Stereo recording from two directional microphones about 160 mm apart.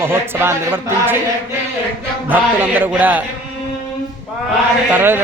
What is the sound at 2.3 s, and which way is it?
Speech, 10° right (ahead or behind).